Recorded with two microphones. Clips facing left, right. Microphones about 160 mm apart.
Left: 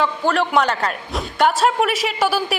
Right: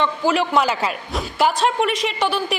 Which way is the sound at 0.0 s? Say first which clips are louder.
Even; centre (ahead or behind).